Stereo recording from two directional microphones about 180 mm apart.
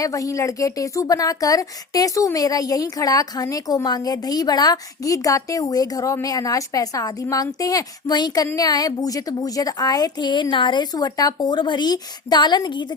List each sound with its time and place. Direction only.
0.0 s a woman's voice: 20° left (ahead or behind)